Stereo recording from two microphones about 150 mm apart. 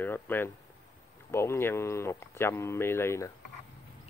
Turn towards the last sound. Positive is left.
turn(degrees=15)  # may be behind; listen again after turning